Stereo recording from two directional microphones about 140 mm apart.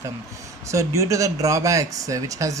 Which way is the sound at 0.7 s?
20° right (ahead or behind).